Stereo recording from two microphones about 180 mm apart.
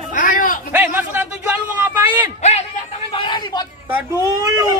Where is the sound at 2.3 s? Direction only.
40° left (ahead or behind).